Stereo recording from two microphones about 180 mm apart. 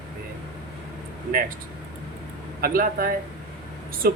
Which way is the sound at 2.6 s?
55° right (ahead or behind).